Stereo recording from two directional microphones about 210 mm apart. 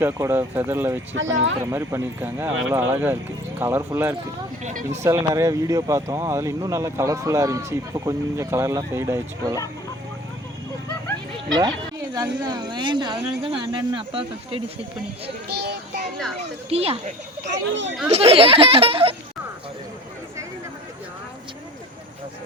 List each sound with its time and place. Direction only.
0.0 s speech: 10° right (ahead or behind)
1.1 s speech: 65° right (ahead or behind)
1.6 s speech: 10° right (ahead or behind)
4.6 s speech: 35° right (ahead or behind)
5.0 s speech: 15° right (ahead or behind)
12.1 s speech: 15° right (ahead or behind)
15.4 s speech: 50° right (ahead or behind)
16.4 s speech: 30° right (ahead or behind)
17.4 s speech: 60° right (ahead or behind)
18.1 s speech: 30° right (ahead or behind)